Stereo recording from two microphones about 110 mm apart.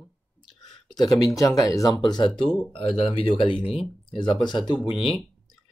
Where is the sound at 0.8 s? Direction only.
40° left (ahead or behind).